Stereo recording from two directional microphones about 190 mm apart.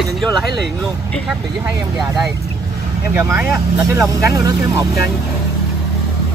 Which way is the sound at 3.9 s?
15° right (ahead or behind).